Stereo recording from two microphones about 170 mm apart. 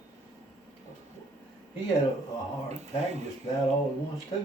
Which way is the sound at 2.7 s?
40° right (ahead or behind).